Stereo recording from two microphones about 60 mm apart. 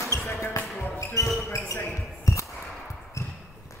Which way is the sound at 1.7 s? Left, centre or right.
Left.